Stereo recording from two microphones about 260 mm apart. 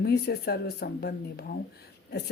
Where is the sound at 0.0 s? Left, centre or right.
Left.